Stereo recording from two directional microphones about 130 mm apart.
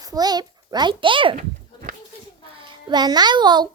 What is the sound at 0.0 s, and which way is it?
A child's voice, 30° right (ahead or behind).